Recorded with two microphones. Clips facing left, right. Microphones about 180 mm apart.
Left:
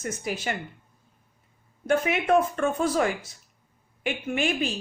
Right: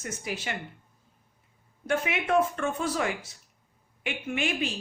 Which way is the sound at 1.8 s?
40° left (ahead or behind).